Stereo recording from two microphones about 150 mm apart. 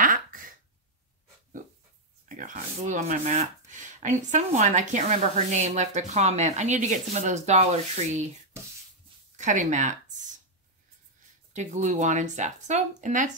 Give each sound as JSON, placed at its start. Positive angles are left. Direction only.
{"t": 0.0, "sound": "throat clearing", "side_deg": -65}
{"t": 2.2, "sound": "speech", "side_deg": -60}
{"t": 9.4, "sound": "a sound", "side_deg": -55}
{"t": 11.5, "sound": "speech", "side_deg": -50}